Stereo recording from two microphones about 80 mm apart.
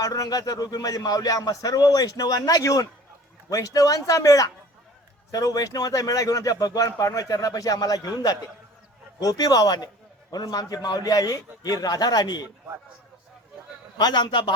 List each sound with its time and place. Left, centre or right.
0.0 s a man's voice: left
14.0 s a man's voice: left